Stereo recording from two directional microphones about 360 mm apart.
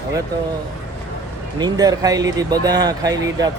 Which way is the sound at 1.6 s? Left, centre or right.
Centre.